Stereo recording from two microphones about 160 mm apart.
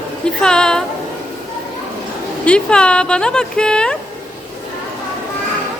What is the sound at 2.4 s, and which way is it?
Speech, 5° left (ahead or behind).